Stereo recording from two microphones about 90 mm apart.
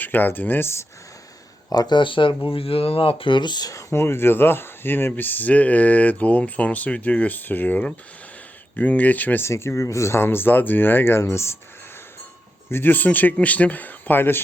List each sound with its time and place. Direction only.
0.0 s speech: 20° left (ahead or behind)
1.7 s speech: 50° left (ahead or behind); by 9.5 s 20° left (ahead or behind)
9.5 s speech: 30° left (ahead or behind)
12.7 s speech: 20° left (ahead or behind)